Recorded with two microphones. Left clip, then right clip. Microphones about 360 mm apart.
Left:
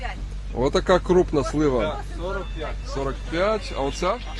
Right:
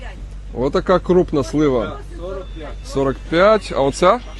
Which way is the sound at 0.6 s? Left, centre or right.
Centre.